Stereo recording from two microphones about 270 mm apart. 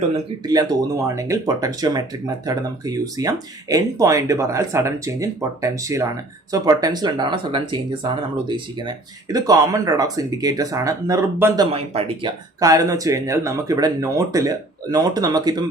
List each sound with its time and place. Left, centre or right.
1.0 s speech: centre